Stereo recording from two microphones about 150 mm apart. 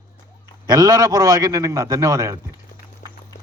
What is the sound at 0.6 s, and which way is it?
A man's voice, 25° right (ahead or behind).